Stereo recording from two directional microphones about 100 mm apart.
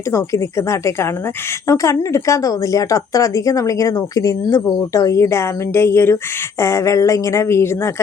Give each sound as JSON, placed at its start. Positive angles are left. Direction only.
{"t": 0.1, "sound": "speech", "side_deg": 25}